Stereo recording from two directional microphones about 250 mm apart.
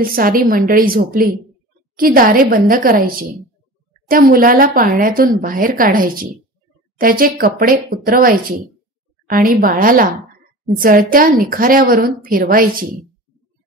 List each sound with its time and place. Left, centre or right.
0.0 s speech: right